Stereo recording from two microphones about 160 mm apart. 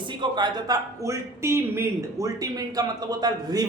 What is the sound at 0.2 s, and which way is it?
Speech, 25° right (ahead or behind).